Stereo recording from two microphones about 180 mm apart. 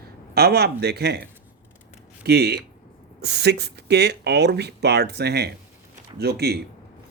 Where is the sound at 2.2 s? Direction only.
65° right (ahead or behind).